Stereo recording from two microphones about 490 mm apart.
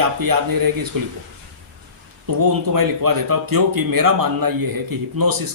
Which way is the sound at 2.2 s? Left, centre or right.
Right.